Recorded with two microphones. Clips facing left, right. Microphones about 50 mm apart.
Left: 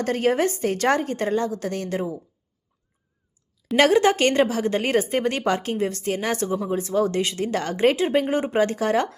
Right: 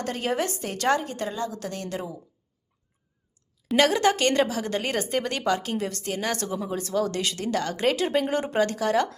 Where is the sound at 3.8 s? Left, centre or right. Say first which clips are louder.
Left 4 dB; left.